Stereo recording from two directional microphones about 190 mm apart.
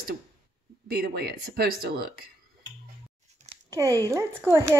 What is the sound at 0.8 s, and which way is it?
Speech, 55° right (ahead or behind).